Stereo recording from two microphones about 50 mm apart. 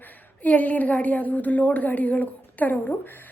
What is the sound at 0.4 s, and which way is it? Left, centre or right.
A woman's voice, left.